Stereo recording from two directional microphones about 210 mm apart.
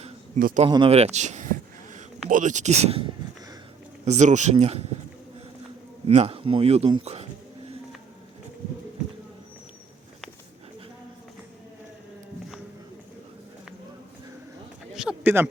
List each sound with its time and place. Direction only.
0.3 s speech: 40° right (ahead or behind)
0.6 s speech: 25° right (ahead or behind)
6.1 s speech: 30° right (ahead or behind)
14.9 s a sound: 5° right (ahead or behind)